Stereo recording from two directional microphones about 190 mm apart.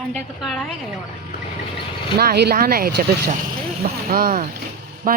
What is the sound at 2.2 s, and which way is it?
Speech, 55° right (ahead or behind).